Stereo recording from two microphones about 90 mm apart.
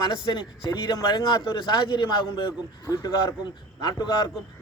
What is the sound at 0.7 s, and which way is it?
Speech, 40° left (ahead or behind).